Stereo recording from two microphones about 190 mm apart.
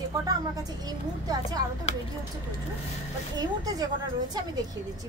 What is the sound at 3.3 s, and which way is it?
Speech, 20° right (ahead or behind).